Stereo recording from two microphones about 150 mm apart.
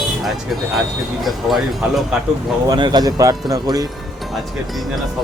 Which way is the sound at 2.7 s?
30° right (ahead or behind).